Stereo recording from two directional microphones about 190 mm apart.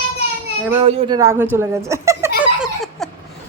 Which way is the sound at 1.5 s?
15° right (ahead or behind).